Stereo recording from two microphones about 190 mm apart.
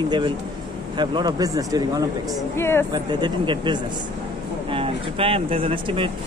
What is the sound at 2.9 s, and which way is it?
A man's voice, 25° right (ahead or behind).